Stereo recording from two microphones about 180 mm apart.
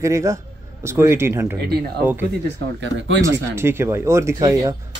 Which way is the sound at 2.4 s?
80° right.